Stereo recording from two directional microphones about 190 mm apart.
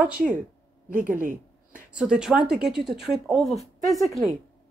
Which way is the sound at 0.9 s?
45° right (ahead or behind).